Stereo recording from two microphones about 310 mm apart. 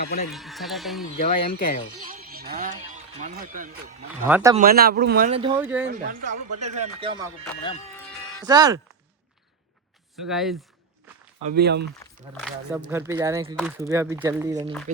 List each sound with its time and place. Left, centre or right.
0.0 s speech: left
0.3 s speech: centre
1.5 s speech: left
2.0 s speech: right
4.3 s speech: centre
4.5 s speech: right
5.3 s speech: centre
5.5 s speech: centre
5.9 s speech: right
7.6 s speech: centre
8.4 s speech: centre
10.2 s speech: centre
11.4 s speech: right
11.9 s speech: centre